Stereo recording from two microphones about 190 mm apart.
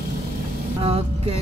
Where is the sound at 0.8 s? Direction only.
30° right (ahead or behind).